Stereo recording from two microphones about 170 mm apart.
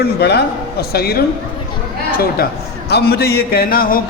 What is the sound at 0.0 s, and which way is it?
A man's voice, 75° left (ahead or behind).